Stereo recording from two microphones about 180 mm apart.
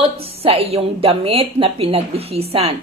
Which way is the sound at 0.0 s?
35° right (ahead or behind).